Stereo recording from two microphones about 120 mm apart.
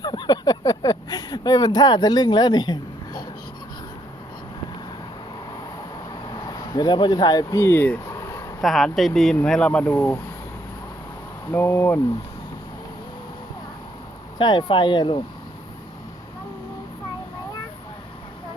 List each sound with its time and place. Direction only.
0.0 s a sound: 35° left (ahead or behind)
6.5 s speech: 35° left (ahead or behind); by 7.9 s 15° left (ahead or behind)
8.1 s a sound: 25° left (ahead or behind)
8.6 s speech: centre (ahead or behind); by 10.2 s 20° left (ahead or behind)
11.5 s speech: 20° left (ahead or behind)
14.3 s speech: 40° left (ahead or behind)